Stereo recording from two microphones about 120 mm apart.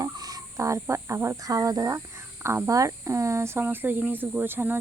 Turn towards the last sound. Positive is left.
turn(degrees=-15)  # may be behind; listen again after turning